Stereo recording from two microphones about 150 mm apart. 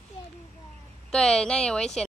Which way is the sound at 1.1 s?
5° left (ahead or behind).